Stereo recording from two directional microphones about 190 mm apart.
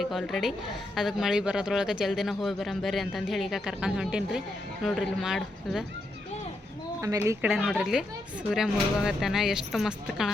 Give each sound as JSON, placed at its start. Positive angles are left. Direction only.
{"t": 0.0, "sound": "speech", "side_deg": 0}
{"t": 7.0, "sound": "speech", "side_deg": -15}
{"t": 7.5, "sound": "speech", "side_deg": 0}